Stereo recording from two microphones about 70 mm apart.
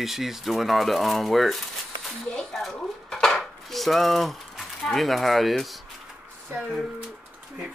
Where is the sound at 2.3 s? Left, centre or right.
Centre.